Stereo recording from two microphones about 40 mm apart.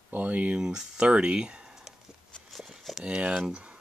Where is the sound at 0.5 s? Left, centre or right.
Centre.